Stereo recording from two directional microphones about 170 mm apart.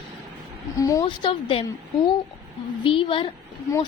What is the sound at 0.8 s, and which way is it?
Speech, 20° left (ahead or behind).